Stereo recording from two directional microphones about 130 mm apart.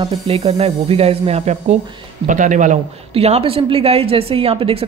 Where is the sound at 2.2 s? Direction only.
80° right.